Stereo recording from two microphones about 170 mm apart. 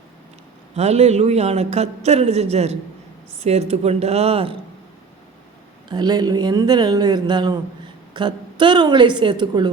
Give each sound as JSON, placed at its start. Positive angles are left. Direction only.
{"t": 0.8, "sound": "speech", "side_deg": -40}
{"t": 5.9, "sound": "speech", "side_deg": -25}